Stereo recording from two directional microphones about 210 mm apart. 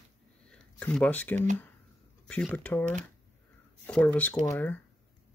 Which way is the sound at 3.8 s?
5° left (ahead or behind).